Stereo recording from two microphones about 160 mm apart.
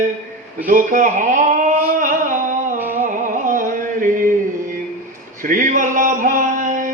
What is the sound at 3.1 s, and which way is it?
Music, 55° right (ahead or behind).